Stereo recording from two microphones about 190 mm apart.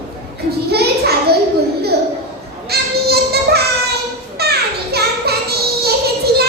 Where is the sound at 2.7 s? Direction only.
55° right (ahead or behind).